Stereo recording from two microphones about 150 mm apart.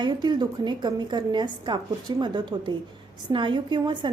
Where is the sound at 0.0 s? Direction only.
30° right (ahead or behind).